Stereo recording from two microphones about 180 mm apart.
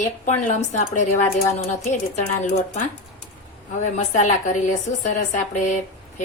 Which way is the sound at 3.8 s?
40° left (ahead or behind).